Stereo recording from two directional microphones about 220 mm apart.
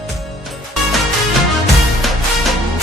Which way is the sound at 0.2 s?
Centre (ahead or behind).